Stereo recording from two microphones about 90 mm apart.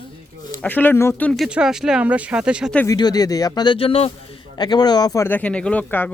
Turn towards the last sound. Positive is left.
turn(degrees=20)  # may be behind; listen again after turning